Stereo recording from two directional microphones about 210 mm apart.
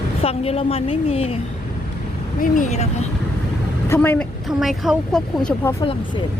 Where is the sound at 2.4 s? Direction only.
35° left (ahead or behind).